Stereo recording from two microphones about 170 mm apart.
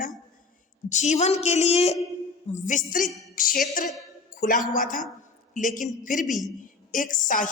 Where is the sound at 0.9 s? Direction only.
45° left (ahead or behind).